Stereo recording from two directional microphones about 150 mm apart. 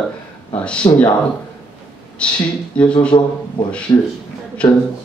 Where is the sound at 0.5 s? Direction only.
5° left (ahead or behind).